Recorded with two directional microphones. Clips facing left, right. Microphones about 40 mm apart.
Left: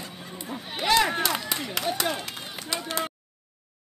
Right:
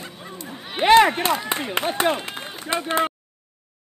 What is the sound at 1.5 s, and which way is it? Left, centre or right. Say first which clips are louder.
Speech: right 5 dB; right.